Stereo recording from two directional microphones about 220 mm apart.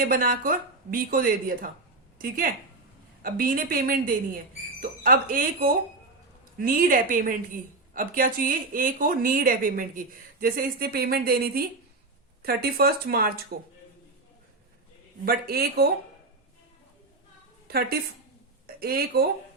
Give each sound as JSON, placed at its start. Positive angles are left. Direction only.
{"t": 0.0, "sound": "a woman's voice", "side_deg": -40}
{"t": 15.2, "sound": "a woman's voice", "side_deg": -45}
{"t": 17.7, "sound": "a woman's voice", "side_deg": -45}